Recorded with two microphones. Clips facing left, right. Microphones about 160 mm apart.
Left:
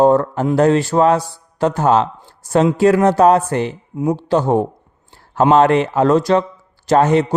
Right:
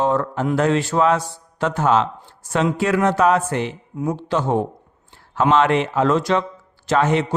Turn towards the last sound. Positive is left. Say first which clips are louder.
# left 5 dB
turn(degrees=40)  # may be behind; listen again after turning